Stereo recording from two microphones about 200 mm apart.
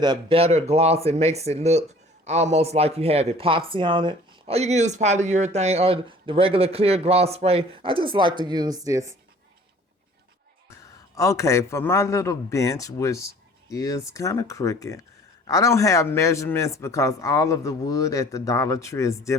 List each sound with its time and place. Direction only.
0.0 s speech: 25° right (ahead or behind)
11.1 s a man's voice: 15° left (ahead or behind)